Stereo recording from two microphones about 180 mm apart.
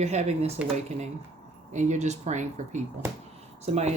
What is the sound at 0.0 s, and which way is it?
Speech, 40° right (ahead or behind).